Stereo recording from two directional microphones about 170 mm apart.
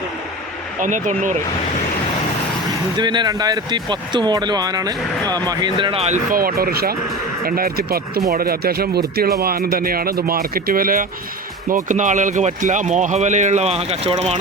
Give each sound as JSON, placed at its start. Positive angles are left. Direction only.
{"t": 0.8, "sound": "speech", "side_deg": -50}
{"t": 3.0, "sound": "speech", "side_deg": -25}
{"t": 6.3, "sound": "speech", "side_deg": -60}